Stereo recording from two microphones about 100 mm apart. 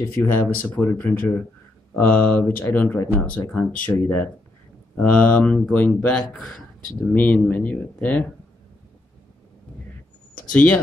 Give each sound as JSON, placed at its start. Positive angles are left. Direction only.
{"t": 0.0, "sound": "speech", "side_deg": 25}
{"t": 10.5, "sound": "speech", "side_deg": 15}